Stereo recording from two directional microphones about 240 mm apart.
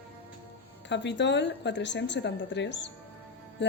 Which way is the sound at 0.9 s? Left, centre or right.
Left.